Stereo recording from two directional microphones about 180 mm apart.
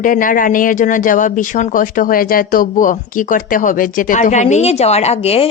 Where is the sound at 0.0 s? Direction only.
50° left (ahead or behind).